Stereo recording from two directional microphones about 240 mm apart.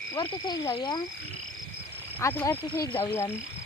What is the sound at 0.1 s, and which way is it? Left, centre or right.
Speech, centre.